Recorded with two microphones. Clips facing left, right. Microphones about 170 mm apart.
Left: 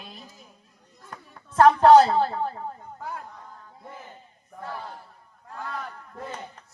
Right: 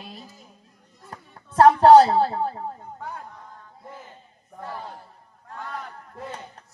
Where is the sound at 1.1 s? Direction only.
30° right (ahead or behind).